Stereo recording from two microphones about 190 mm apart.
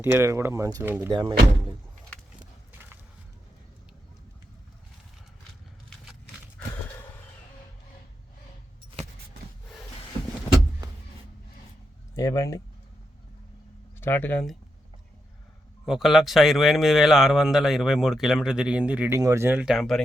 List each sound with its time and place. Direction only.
0.0 s speech: 15° right (ahead or behind)
12.1 s speech: 15° left (ahead or behind)
14.0 s speech: 10° left (ahead or behind)
15.9 s speech: centre (ahead or behind)